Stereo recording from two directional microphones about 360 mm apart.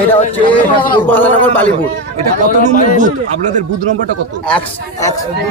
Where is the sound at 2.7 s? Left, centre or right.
Left.